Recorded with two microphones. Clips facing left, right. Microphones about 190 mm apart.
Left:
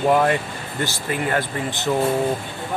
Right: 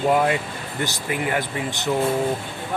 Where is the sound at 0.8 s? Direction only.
15° right (ahead or behind).